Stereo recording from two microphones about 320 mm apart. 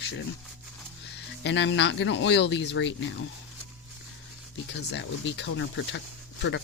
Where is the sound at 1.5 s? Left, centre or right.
Left.